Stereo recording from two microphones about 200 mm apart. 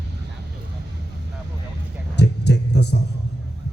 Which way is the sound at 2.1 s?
60° left (ahead or behind).